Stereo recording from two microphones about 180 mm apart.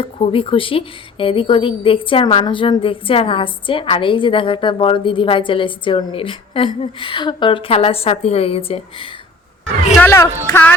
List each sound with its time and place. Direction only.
0.0 s a woman's voice: 30° left (ahead or behind)
10.0 s speech: 15° left (ahead or behind)